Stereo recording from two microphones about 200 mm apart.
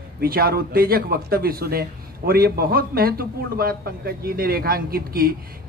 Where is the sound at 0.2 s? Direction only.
50° right (ahead or behind).